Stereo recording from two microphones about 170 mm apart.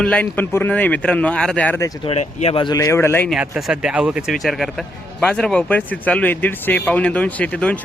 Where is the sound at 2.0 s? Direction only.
35° left (ahead or behind).